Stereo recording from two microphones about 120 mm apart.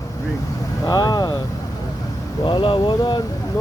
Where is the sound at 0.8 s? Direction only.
35° left (ahead or behind).